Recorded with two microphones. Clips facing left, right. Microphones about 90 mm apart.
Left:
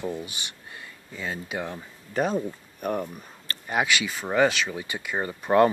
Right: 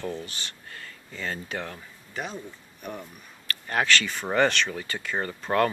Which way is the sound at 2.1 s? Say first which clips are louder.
Left 10 dB; 45° left (ahead or behind).